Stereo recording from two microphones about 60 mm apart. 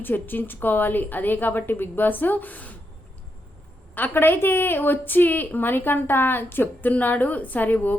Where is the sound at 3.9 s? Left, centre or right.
Left.